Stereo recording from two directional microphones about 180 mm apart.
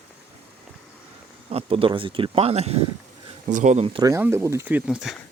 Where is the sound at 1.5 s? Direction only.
30° right (ahead or behind).